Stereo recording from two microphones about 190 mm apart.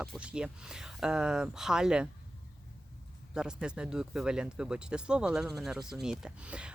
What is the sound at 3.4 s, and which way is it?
Speech, 5° right (ahead or behind).